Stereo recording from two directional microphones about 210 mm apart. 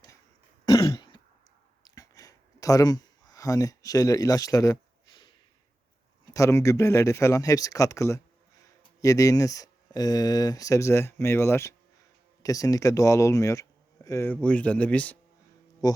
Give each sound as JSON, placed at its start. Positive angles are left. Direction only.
{"t": 0.6, "sound": "throat clearing", "side_deg": 20}
{"t": 1.8, "sound": "a sound", "side_deg": 15}
{"t": 6.2, "sound": "speech", "side_deg": 15}
{"t": 15.8, "sound": "speech", "side_deg": 20}